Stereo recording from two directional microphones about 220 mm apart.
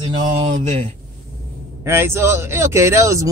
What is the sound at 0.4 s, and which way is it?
Speech, 30° right (ahead or behind).